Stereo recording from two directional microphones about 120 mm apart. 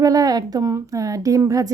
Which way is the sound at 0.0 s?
30° right (ahead or behind).